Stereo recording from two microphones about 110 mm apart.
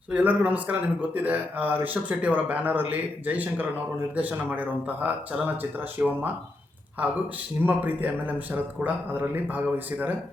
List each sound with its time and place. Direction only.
0.1 s speech: 15° right (ahead or behind)
7.6 s speech: 15° right (ahead or behind)